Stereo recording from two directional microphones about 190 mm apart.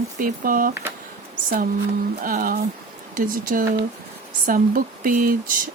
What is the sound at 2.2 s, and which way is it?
Speech, 45° right (ahead or behind).